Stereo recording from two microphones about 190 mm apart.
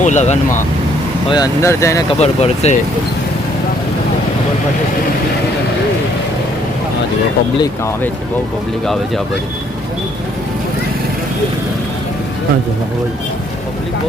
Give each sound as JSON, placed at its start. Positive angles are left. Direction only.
{"t": 0.0, "sound": "speech", "side_deg": 40}
{"t": 1.3, "sound": "speech", "side_deg": 20}
{"t": 2.0, "sound": "speech", "side_deg": 35}